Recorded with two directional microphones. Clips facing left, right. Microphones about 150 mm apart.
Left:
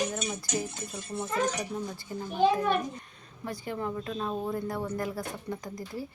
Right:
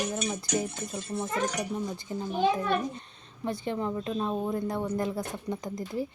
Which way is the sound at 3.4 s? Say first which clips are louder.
Right 3 dB; 25° right (ahead or behind).